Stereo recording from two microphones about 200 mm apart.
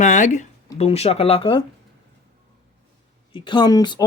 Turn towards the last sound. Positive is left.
turn(degrees=20)  # may be behind; listen again after turning